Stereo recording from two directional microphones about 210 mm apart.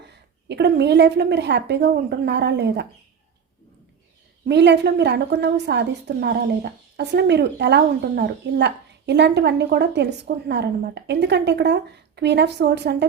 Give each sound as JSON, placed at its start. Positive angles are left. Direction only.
{"t": 0.1, "sound": "a woman's voice", "side_deg": -55}
{"t": 4.4, "sound": "a woman's voice", "side_deg": -55}